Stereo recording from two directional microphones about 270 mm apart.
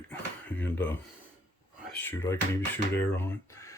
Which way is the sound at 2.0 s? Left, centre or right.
Centre.